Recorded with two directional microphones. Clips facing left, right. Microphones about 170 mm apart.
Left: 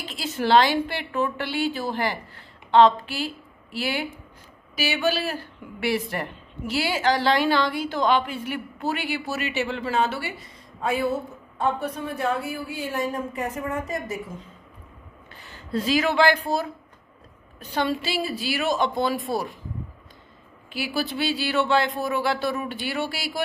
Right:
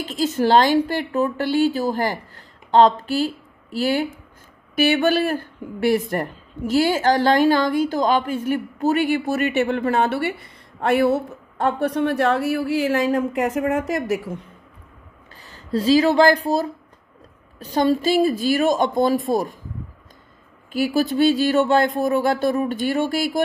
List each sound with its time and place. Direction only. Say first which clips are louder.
0.0 s a woman's voice: right 7 dB; 45° right (ahead or behind)
4.7 s speech: right 7 dB; 55° right (ahead or behind); by 14.4 s 75° right (ahead or behind)
15.4 s speech: right 6 dB; 35° right (ahead or behind)
20.7 s speech: right 8 dB; 45° right (ahead or behind)